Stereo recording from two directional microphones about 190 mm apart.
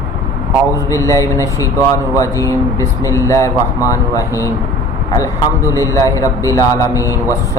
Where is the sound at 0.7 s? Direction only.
15° left (ahead or behind).